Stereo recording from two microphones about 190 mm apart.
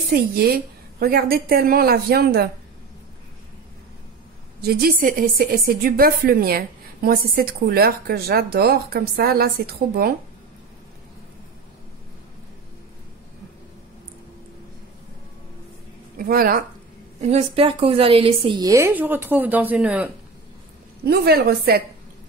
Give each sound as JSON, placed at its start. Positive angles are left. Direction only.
{"t": 0.1, "sound": "a woman's voice", "side_deg": -55}
{"t": 4.6, "sound": "a woman's voice", "side_deg": -55}
{"t": 16.2, "sound": "a woman's voice", "side_deg": -50}
{"t": 17.2, "sound": "a woman's voice", "side_deg": -35}
{"t": 21.0, "sound": "a woman's voice", "side_deg": -55}